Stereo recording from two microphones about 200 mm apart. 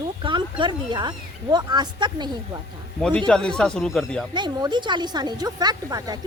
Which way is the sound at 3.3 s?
5° left (ahead or behind).